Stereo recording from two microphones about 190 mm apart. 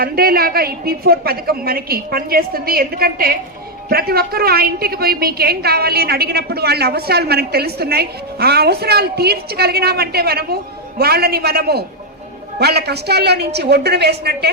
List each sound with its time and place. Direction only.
0.0 s a woman's voice: 50° right (ahead or behind)